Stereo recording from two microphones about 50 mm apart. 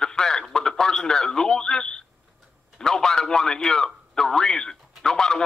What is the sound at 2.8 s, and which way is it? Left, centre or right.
A man's voice, centre.